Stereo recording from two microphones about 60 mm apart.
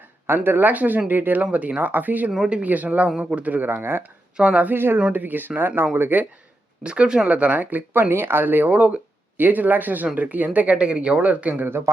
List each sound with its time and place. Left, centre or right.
0.3 s speech: right
1.4 s speech: right
2.3 s speech: centre
2.6 s speech: right
4.4 s speech: centre
4.6 s speech: right
4.9 s speech: right
6.8 s speech: centre